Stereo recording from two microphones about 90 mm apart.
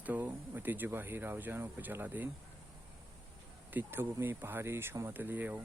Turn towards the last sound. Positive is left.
turn(degrees=-20)  # may be behind; listen again after turning